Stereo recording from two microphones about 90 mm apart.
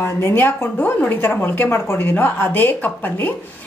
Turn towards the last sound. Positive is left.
turn(degrees=20)  # may be behind; listen again after turning